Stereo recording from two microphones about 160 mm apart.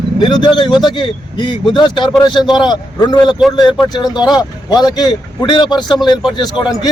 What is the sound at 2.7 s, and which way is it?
A man's voice, 25° left (ahead or behind).